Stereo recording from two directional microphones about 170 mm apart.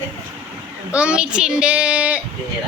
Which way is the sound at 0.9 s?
5° right (ahead or behind).